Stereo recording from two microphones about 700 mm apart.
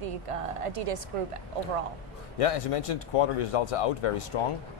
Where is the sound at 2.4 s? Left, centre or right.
Left.